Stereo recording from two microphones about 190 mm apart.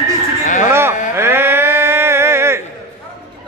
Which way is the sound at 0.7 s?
15° right (ahead or behind).